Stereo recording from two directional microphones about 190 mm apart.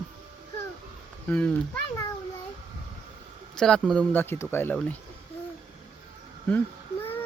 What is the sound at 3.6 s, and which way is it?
Speech, 5° left (ahead or behind).